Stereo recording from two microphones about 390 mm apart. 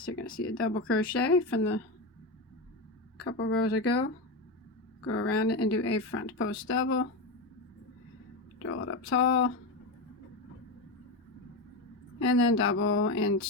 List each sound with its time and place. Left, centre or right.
0.3 s speech: left
3.2 s speech: left
3.7 s speech: left
5.0 s speech: left
5.3 s speech: left
8.5 s speech: left
12.2 s speech: left